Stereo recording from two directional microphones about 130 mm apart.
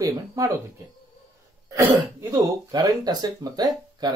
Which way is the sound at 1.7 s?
20° right (ahead or behind).